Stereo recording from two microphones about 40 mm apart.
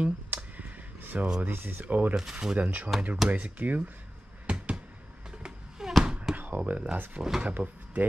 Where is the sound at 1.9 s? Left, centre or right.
Right.